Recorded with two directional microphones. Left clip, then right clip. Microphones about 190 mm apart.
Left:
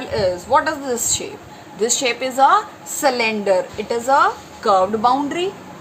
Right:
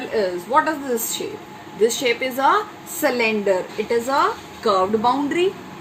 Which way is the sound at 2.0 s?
50° left (ahead or behind).